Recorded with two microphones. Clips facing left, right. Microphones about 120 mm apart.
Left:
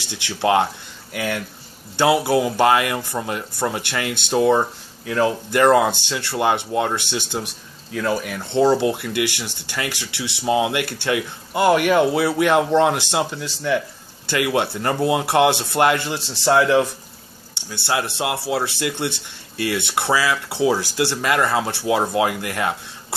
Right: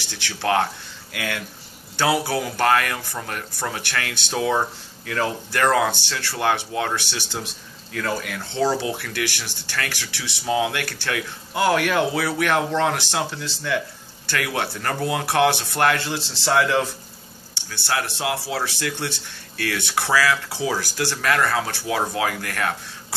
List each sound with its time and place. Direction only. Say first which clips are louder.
0.1 s speech: left 4 dB; 20° left (ahead or behind)
2.0 s speech: left 5 dB; 20° left (ahead or behind)
4.3 s speech: left 6 dB; 5° left (ahead or behind)
5.9 s speech: left 3 dB; 20° left (ahead or behind)
7.9 s speech: left 4 dB; 5° left (ahead or behind)
17.6 s speech: left 3 dB; 20° left (ahead or behind)